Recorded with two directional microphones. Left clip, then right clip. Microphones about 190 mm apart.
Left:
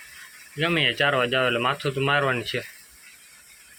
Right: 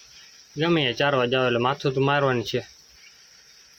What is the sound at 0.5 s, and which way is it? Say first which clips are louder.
Speech: even; 25° right (ahead or behind).